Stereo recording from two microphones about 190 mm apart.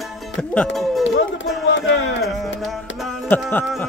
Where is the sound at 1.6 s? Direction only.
80° left.